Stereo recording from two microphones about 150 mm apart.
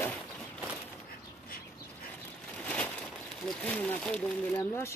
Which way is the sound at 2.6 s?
10° left (ahead or behind).